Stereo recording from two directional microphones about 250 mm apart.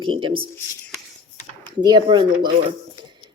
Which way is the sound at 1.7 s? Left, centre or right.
Centre.